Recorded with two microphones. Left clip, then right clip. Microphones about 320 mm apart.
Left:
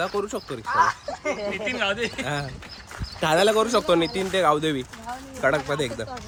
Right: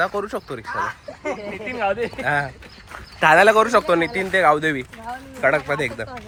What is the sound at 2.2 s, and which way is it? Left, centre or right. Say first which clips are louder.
Speech: right 8 dB; centre.